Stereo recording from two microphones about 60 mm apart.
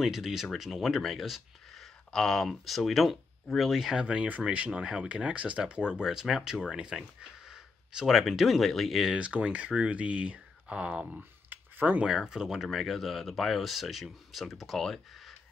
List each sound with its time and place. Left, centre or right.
0.0 s speech: centre
9.1 s speech: right
12.3 s speech: centre